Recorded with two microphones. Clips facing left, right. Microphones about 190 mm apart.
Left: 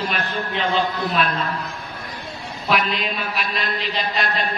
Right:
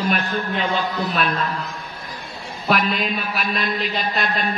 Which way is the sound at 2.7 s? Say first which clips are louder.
Right 2 dB; 45° right (ahead or behind).